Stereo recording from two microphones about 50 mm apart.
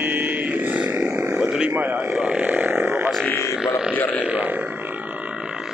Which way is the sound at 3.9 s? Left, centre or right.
Left.